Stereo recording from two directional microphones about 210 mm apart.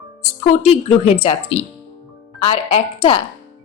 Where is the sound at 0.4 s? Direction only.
30° left (ahead or behind).